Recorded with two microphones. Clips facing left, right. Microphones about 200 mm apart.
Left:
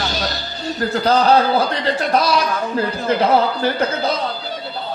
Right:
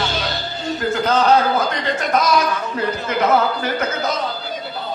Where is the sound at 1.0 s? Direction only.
35° left (ahead or behind).